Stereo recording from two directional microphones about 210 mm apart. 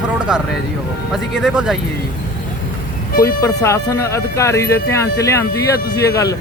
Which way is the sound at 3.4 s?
15° left (ahead or behind).